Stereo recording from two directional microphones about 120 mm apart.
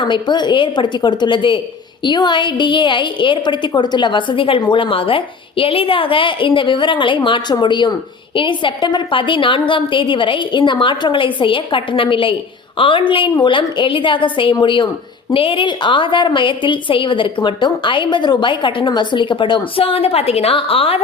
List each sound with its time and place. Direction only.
0.0 s a woman's voice: 40° left (ahead or behind)